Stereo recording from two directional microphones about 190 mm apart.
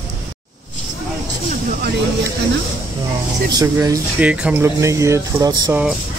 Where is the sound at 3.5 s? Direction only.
20° right (ahead or behind).